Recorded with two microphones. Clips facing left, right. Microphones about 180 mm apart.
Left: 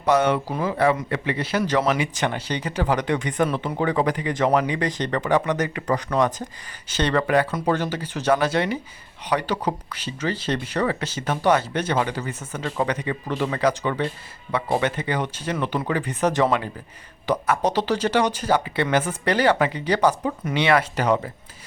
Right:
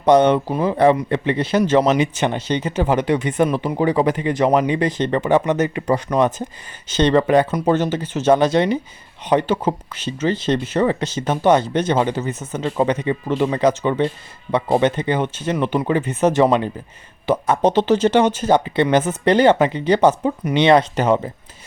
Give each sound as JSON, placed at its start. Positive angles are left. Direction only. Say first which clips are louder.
{"t": 0.0, "sound": "speech", "louder": "right 6 dB", "side_deg": -30}